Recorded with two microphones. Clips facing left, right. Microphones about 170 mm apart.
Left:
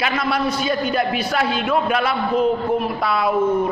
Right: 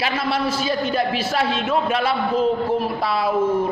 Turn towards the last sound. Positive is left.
turn(degrees=-30)  # may be behind; listen again after turning